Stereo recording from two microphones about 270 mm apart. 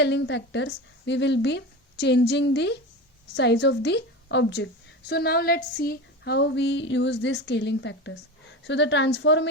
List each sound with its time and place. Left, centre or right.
0.0 s a woman's voice: left